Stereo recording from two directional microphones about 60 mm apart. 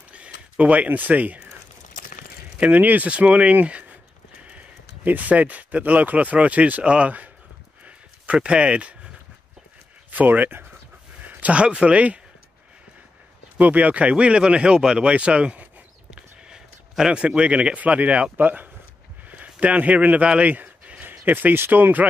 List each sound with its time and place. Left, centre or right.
0.1 s speech: right
2.6 s speech: right
7.8 s a sound: centre
10.1 s speech: right
13.6 s speech: right